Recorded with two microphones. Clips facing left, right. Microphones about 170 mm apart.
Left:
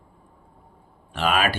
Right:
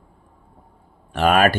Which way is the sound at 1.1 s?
50° right (ahead or behind).